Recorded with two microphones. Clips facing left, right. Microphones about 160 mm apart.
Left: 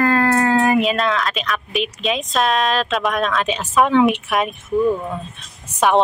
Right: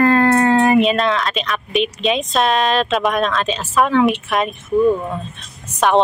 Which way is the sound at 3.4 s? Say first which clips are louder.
Even; 15° left (ahead or behind).